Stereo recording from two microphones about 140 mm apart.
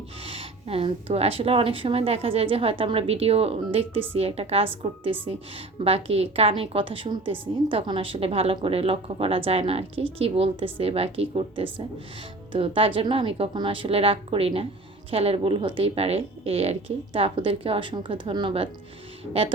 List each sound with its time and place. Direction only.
0.3 s a woman's voice: 45° right (ahead or behind)
5.1 s speech: 15° right (ahead or behind)
5.8 s a woman's voice: 45° right (ahead or behind)